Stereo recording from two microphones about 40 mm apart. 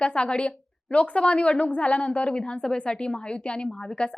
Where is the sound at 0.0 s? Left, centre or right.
Left.